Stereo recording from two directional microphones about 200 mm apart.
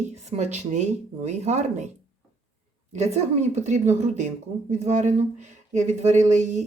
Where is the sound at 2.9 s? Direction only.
35° right (ahead or behind).